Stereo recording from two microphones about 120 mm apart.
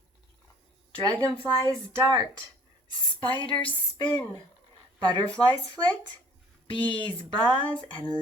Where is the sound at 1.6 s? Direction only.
30° right (ahead or behind).